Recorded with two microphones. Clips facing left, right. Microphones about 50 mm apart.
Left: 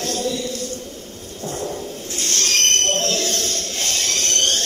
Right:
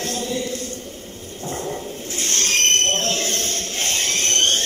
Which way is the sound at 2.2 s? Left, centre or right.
Right.